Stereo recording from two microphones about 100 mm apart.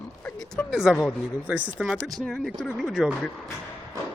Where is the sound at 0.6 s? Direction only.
20° left (ahead or behind).